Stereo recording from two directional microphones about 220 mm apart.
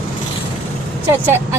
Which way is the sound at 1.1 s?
10° right (ahead or behind).